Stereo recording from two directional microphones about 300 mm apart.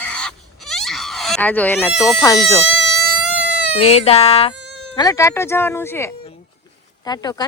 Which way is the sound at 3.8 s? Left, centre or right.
Left.